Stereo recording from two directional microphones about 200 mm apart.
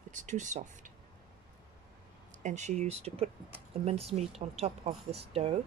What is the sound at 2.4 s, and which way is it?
Speech, 35° right (ahead or behind).